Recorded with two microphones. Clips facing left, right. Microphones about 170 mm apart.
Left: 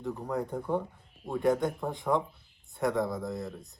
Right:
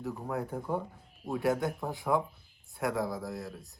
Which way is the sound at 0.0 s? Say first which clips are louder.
Left 2 dB; 5° right (ahead or behind).